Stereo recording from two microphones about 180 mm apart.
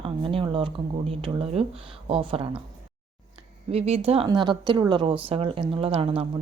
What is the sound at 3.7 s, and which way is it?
A woman's voice, 35° right (ahead or behind).